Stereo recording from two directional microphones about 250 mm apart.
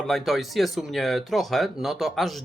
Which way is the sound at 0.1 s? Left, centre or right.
Centre.